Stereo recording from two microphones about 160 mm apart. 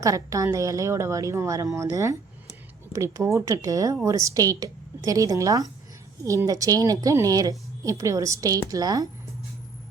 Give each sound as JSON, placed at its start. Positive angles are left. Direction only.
{"t": 0.0, "sound": "a woman's voice", "side_deg": -20}